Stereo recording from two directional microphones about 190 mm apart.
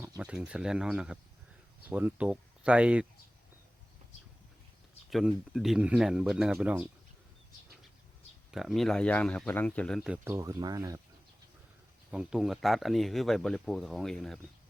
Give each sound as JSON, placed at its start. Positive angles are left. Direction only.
{"t": 0.0, "sound": "speech", "side_deg": -10}
{"t": 5.1, "sound": "speech", "side_deg": 0}
{"t": 8.4, "sound": "speech", "side_deg": 0}
{"t": 10.3, "sound": "speech", "side_deg": -15}
{"t": 12.1, "sound": "speech", "side_deg": 0}